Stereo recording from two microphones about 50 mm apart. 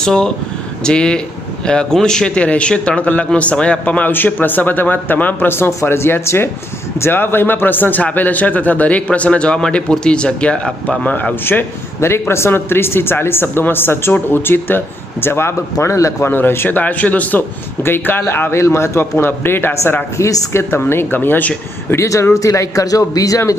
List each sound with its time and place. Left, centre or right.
0.0 s a man's voice: centre
4.1 s a man's voice: left; by 10.7 s centre
10.8 s speech: left
11.9 s speech: left
15.2 s a man's voice: left
16.3 s speech: left
16.7 s speech: left
17.8 s speech: left
18.5 s speech: left
20.1 s a man's voice: left
20.9 s speech: left
21.9 s a man's voice: left